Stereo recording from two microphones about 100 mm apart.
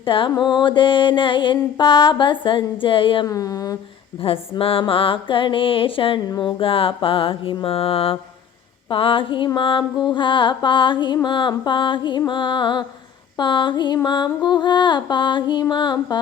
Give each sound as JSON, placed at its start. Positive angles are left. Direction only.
{"t": 0.0, "sound": "mantra", "side_deg": 60}
{"t": 0.3, "sound": "mantra", "side_deg": 45}
{"t": 3.2, "sound": "a sound", "side_deg": 35}
{"t": 4.2, "sound": "mantra", "side_deg": 65}
{"t": 6.2, "sound": "mantra", "side_deg": 45}
{"t": 6.6, "sound": "mantra", "side_deg": 65}
{"t": 8.9, "sound": "mantra", "side_deg": 60}